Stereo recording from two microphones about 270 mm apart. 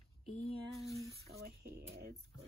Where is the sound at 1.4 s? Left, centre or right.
Right.